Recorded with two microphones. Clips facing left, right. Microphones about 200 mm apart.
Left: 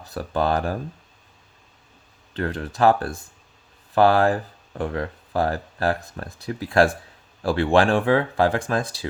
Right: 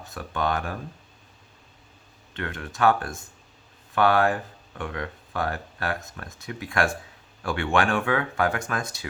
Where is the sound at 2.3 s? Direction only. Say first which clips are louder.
Left 6 dB; 35° left (ahead or behind).